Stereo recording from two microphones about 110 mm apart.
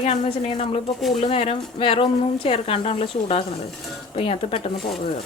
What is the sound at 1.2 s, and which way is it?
Speech, 60° left (ahead or behind).